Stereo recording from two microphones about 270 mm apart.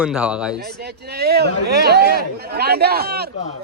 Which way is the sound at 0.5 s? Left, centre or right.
Right.